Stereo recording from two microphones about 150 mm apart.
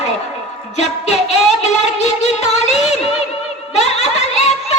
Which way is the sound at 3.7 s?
45° left (ahead or behind).